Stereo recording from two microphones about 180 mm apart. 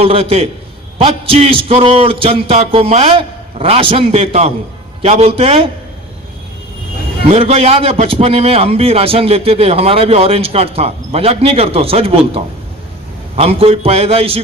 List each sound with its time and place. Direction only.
0.0 s a man's voice: 35° right (ahead or behind)
7.3 s a man's voice: 35° right (ahead or behind)